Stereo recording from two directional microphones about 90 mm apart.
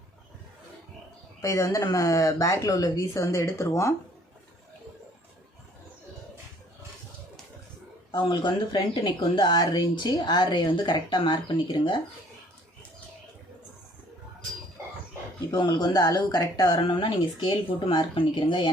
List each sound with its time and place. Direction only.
1.4 s speech: 35° left (ahead or behind)
8.1 s speech: 55° left (ahead or behind)
15.5 s speech: 50° left (ahead or behind)
16.8 s speech: 65° left (ahead or behind)